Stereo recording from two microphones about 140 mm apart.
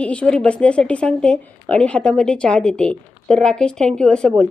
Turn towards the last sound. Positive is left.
turn(degrees=5)  # may be behind; listen again after turning